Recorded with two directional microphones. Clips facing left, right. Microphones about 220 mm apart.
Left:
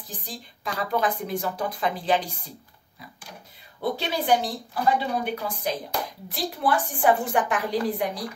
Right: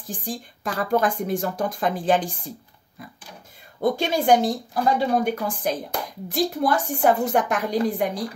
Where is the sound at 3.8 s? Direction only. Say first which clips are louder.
Right 6 dB; 45° right (ahead or behind).